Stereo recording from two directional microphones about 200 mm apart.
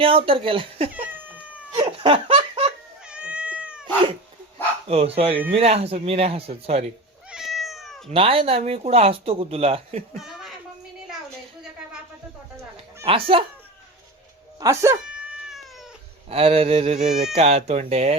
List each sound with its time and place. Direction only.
0.0 s speech: 25° right (ahead or behind)
1.1 s cat: 5° right (ahead or behind)
1.7 s laughter: 25° right (ahead or behind)
3.1 s cat: 5° right (ahead or behind)
4.9 s speech: 30° right (ahead or behind)
7.3 s cat: centre (ahead or behind)
8.1 s speech: 30° right (ahead or behind)
10.2 s a sound: centre (ahead or behind)
13.1 s speech: 25° right (ahead or behind)
14.6 s cat: 15° right (ahead or behind)
16.3 s speech: 30° right (ahead or behind)